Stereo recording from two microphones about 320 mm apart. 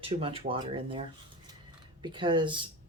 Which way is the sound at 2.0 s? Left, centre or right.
Centre.